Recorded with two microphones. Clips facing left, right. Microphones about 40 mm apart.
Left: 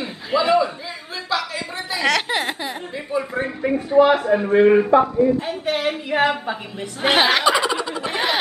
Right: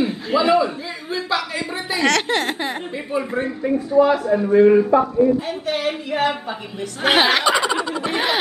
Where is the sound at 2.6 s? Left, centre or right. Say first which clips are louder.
Right 3 dB; centre.